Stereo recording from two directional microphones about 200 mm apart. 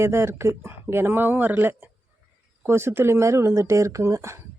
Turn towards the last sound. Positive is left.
turn(degrees=-15)  # may be behind; listen again after turning